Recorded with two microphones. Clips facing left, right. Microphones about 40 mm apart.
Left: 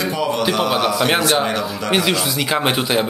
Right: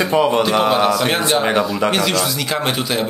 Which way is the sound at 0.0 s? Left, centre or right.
Right.